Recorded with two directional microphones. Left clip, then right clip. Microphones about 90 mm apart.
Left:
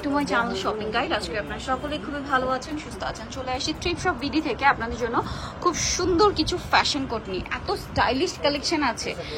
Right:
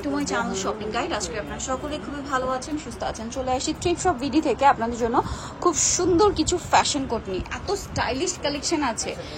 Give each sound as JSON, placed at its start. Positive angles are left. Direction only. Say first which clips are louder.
{"t": 0.0, "sound": "a woman's voice", "louder": "left 2 dB", "side_deg": -25}
{"t": 3.0, "sound": "speech", "louder": "right 3 dB", "side_deg": -50}
{"t": 6.1, "sound": "speech", "louder": "left 1 dB", "side_deg": -35}
{"t": 7.6, "sound": "a woman's voice", "louder": "left 3 dB", "side_deg": -20}
{"t": 8.6, "sound": "speech", "louder": "even", "side_deg": -40}